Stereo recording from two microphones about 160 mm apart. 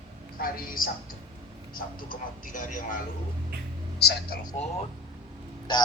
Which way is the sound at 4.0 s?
75° left (ahead or behind).